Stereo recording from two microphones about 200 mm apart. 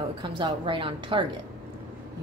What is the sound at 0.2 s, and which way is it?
Speech, 25° right (ahead or behind).